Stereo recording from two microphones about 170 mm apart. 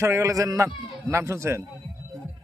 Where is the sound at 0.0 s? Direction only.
15° right (ahead or behind).